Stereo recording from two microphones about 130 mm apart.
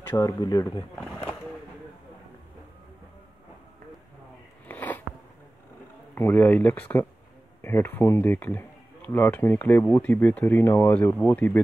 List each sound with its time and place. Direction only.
0.1 s speech: 25° left (ahead or behind)
4.6 s a sound: 15° left (ahead or behind)
6.1 s speech: 15° left (ahead or behind)